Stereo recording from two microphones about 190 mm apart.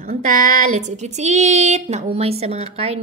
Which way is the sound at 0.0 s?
45° right (ahead or behind).